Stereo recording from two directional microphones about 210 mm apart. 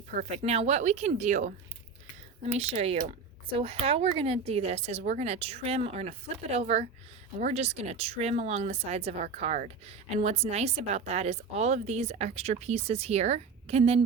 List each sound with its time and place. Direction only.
0.2 s speech: 35° right (ahead or behind)